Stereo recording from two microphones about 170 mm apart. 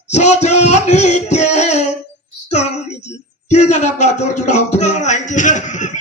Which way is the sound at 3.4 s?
40° left (ahead or behind).